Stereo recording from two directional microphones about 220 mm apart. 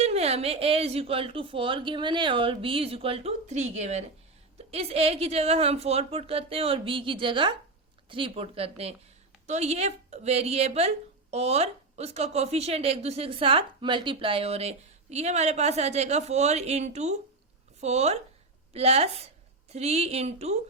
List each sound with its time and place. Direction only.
0.0 s a woman's voice: 30° right (ahead or behind)